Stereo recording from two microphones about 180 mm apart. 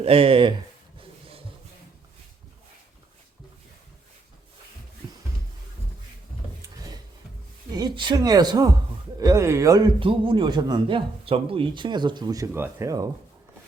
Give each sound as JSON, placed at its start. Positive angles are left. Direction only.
{"t": 0.0, "sound": "speech", "side_deg": -30}
{"t": 6.6, "sound": "a sound", "side_deg": -20}
{"t": 7.7, "sound": "a man's voice", "side_deg": -25}